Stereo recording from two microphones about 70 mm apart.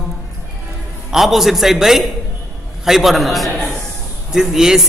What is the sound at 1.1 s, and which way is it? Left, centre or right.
A man's voice, centre.